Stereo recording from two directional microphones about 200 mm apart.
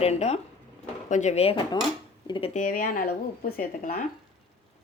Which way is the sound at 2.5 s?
40° left (ahead or behind).